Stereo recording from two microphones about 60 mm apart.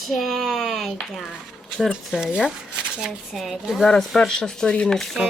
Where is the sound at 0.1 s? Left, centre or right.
Centre.